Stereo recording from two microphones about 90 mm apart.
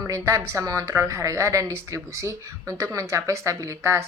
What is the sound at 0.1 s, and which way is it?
A woman's voice, 35° right (ahead or behind).